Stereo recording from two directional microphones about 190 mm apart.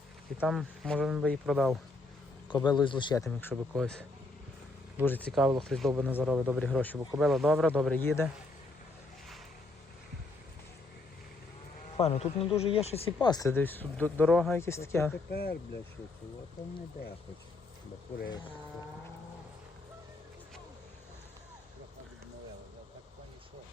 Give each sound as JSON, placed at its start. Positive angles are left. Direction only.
{"t": 0.3, "sound": "speech", "side_deg": 0}
{"t": 2.5, "sound": "speech", "side_deg": 25}
{"t": 3.4, "sound": "speech", "side_deg": 5}
{"t": 5.3, "sound": "speech", "side_deg": 0}
{"t": 5.9, "sound": "a man's voice", "side_deg": -10}
{"t": 11.9, "sound": "speech", "side_deg": 30}
{"t": 13.3, "sound": "speech", "side_deg": 15}
{"t": 15.3, "sound": "speech", "side_deg": 55}
{"t": 16.6, "sound": "speech", "side_deg": 20}